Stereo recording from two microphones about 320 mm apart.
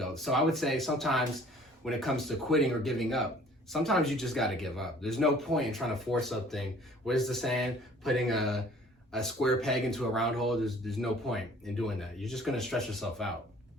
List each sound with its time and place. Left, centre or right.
0.0 s speech: centre